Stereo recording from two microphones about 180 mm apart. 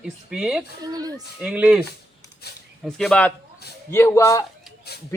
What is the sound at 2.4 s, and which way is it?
Speech, 60° left (ahead or behind).